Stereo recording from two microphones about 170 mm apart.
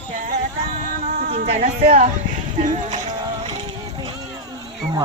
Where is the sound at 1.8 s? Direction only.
60° right (ahead or behind).